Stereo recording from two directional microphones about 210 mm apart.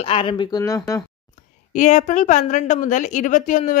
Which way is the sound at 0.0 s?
25° left (ahead or behind).